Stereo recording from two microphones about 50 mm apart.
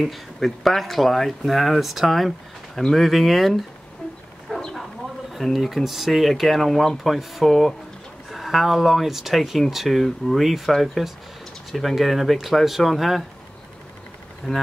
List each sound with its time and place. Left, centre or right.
0.0 s speech: centre
4.5 s dog: centre
4.7 s speech: centre
14.4 s speech: centre